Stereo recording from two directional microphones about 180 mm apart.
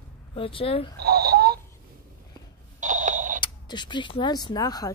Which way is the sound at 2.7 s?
45° right (ahead or behind).